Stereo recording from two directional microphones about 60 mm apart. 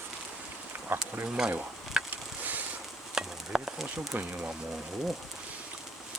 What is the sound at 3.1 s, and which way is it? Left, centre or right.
Stir, centre.